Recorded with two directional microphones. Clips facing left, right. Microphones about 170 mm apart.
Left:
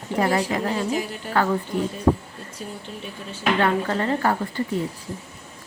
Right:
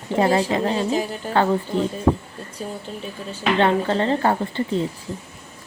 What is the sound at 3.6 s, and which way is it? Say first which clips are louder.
A woman's voice: right 5 dB; 25° right (ahead or behind).